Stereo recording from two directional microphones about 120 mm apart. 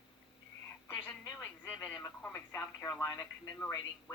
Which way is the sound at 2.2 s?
10° left (ahead or behind).